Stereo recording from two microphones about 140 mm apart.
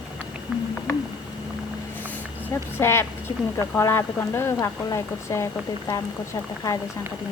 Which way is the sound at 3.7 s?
15° left (ahead or behind).